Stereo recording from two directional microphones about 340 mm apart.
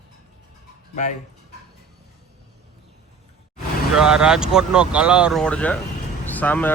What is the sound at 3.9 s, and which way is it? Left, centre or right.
Speech, centre.